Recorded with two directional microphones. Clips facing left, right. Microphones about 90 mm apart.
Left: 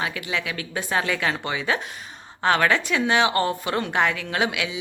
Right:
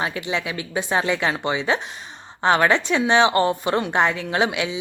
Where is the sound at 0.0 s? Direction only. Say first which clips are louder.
Right 3 dB; 25° right (ahead or behind).